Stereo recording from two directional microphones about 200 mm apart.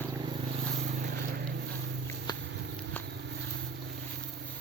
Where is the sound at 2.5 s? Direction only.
60° right (ahead or behind).